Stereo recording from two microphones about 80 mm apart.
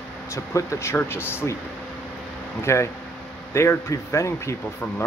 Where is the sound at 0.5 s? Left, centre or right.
Left.